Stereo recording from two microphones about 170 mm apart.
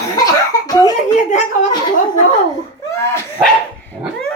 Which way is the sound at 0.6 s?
20° left (ahead or behind).